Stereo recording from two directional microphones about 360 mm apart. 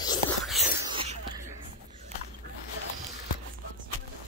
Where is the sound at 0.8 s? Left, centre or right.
Centre.